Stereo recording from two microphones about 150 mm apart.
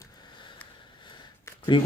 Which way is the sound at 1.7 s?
30° left (ahead or behind).